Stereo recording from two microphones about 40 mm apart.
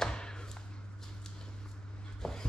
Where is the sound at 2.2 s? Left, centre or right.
Centre.